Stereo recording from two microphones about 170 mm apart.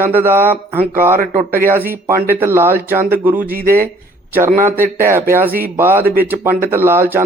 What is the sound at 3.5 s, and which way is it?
Speech, 60° right (ahead or behind).